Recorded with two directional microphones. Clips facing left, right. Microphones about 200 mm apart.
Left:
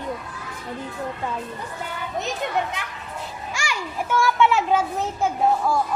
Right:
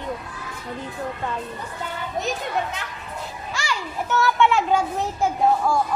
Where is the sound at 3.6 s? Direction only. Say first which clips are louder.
Right 1 dB; 10° left (ahead or behind).